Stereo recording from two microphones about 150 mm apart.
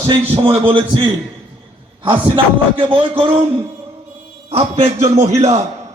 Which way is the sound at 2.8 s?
40° right (ahead or behind).